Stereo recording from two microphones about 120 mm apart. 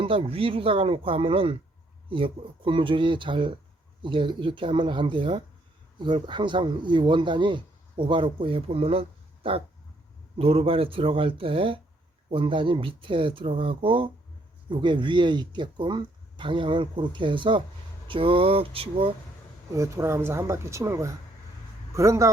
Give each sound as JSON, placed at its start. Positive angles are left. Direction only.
{"t": 0.0, "sound": "speech", "side_deg": -50}
{"t": 19.7, "sound": "speech", "side_deg": -25}